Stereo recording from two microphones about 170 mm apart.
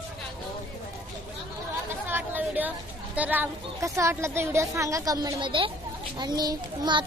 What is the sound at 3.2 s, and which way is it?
A woman's voice, 10° right (ahead or behind).